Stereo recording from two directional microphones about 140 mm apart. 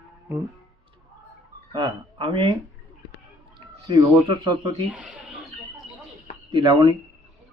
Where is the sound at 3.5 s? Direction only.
30° right (ahead or behind).